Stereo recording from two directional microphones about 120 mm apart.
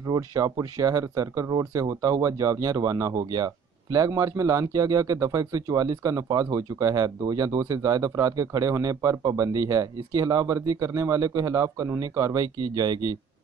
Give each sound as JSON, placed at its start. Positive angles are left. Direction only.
{"t": 0.0, "sound": "speech", "side_deg": -30}